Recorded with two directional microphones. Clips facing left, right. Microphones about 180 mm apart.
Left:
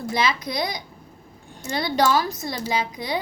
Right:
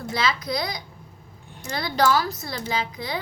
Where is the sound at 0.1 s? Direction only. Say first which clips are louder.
Left 1 dB; 20° left (ahead or behind).